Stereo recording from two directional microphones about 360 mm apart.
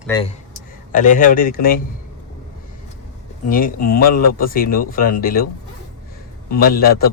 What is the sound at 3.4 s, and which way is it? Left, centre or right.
A man's voice, left.